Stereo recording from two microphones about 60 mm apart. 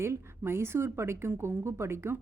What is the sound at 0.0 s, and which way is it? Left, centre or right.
A woman's voice, right.